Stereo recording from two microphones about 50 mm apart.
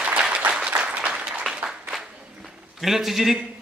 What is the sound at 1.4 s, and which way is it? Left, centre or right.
Applause, centre.